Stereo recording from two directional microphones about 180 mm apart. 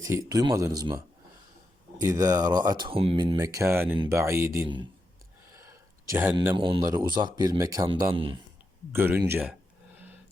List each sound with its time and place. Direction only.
0.0 s speech: 15° right (ahead or behind)
6.1 s speech: 10° right (ahead or behind)
6.6 s speech: 25° right (ahead or behind)
8.1 s speech: 30° right (ahead or behind)
8.9 s speech: 10° right (ahead or behind)